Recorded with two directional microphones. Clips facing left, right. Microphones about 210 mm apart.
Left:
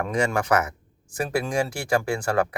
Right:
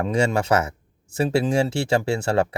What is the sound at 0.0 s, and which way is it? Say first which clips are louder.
Speech: right 3 dB; 25° right (ahead or behind).